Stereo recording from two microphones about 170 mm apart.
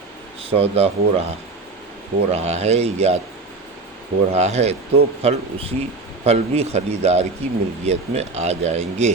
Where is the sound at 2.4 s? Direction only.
40° right (ahead or behind).